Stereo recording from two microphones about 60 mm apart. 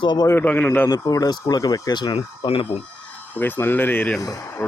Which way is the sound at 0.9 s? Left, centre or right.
Left.